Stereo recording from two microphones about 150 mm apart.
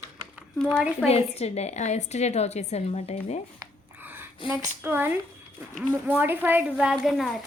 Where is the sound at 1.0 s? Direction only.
45° left (ahead or behind).